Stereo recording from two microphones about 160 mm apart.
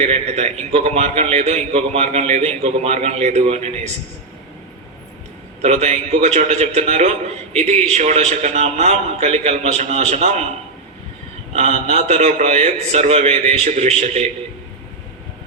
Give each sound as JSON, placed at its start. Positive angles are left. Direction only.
{"t": 0.0, "sound": "a man's voice", "side_deg": -45}
{"t": 5.6, "sound": "a man's voice", "side_deg": -45}
{"t": 11.5, "sound": "a man's voice", "side_deg": -40}